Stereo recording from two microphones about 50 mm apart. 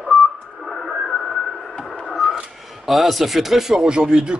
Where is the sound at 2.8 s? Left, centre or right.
Centre.